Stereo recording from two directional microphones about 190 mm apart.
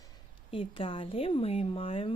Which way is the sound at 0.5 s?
30° left (ahead or behind).